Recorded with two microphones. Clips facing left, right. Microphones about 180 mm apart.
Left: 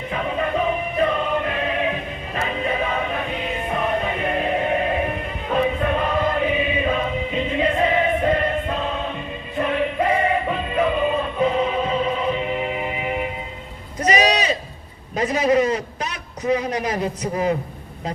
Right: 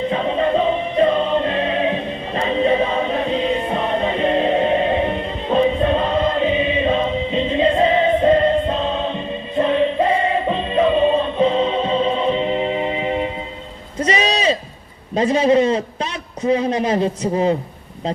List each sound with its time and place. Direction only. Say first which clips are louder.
0.1 s music: right 2 dB; 30° right (ahead or behind)
14.0 s sheep: right 1 dB; 30° right (ahead or behind)
15.1 s a sound: right 4 dB; 30° right (ahead or behind)